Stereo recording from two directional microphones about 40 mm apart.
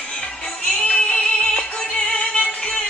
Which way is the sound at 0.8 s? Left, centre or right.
Left.